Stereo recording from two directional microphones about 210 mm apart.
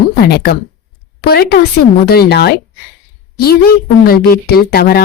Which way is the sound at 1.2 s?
45° left (ahead or behind).